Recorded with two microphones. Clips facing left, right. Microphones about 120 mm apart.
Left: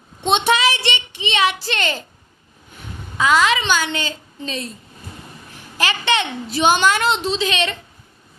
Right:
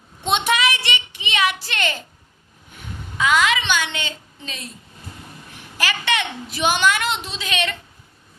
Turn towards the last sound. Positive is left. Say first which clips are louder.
# left 5 dB
turn(degrees=30)  # may be behind; listen again after turning